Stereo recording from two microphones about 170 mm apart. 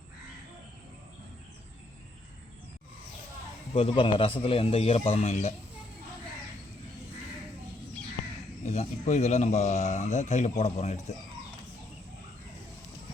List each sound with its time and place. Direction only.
3.7 s speech: 35° left (ahead or behind)
8.6 s speech: 40° left (ahead or behind)